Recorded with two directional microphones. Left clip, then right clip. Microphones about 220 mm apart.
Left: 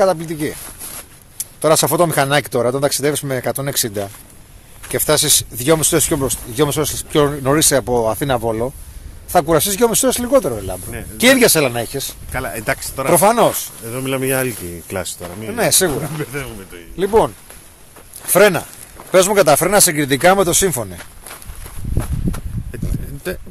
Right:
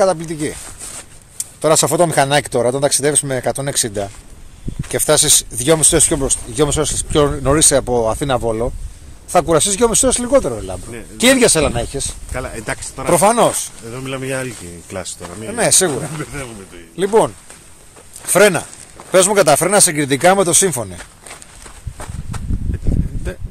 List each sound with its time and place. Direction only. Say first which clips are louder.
0.0 s speech: even; centre (ahead or behind)
10.8 s speech: left 1 dB; 40° left (ahead or behind)
11.1 s speech: even; centre (ahead or behind)
12.3 s speech: left 6 dB; 40° left (ahead or behind)
13.1 s speech: even; 5° right (ahead or behind)
13.8 s speech: left 6 dB; 50° left (ahead or behind)
15.4 s speech: right 1 dB; 5° right (ahead or behind)
16.2 s speech: left 2 dB; 45° left (ahead or behind)
16.9 s speech: right 1 dB; 10° right (ahead or behind)
18.3 s speech: even; 5° right (ahead or behind)
23.3 s speech: left 8 dB; 50° left (ahead or behind)